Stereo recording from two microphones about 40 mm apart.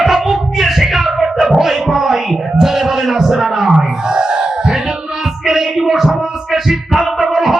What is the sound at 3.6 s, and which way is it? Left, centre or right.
Wail, right.